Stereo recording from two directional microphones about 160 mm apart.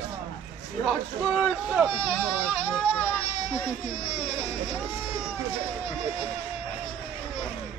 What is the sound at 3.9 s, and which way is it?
Speech, 40° left (ahead or behind).